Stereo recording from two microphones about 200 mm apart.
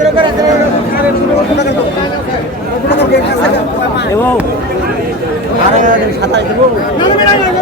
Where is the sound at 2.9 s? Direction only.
55° left (ahead or behind).